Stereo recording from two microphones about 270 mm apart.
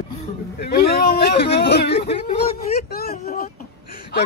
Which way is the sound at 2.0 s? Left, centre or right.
Left.